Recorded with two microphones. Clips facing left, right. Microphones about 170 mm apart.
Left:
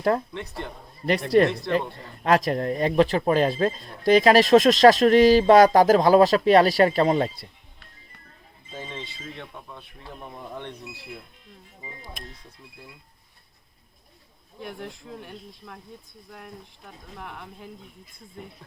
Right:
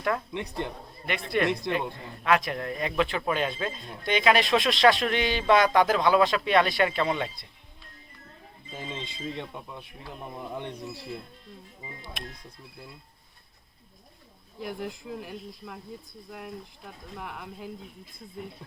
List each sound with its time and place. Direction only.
0.3 s speech: 15° right (ahead or behind)
1.3 s speech: 35° left (ahead or behind)
9.0 s speech: 20° right (ahead or behind)
12.2 s speech: 70° right (ahead or behind)
14.6 s speech: centre (ahead or behind)